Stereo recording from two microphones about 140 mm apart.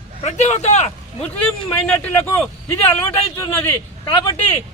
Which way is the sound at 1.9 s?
5° left (ahead or behind).